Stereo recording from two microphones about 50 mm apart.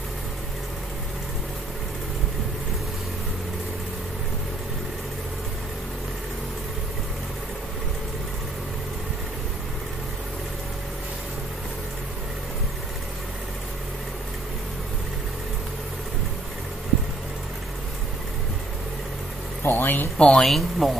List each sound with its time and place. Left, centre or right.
19.6 s a sound: left
20.2 s speech: centre
20.4 s speech: centre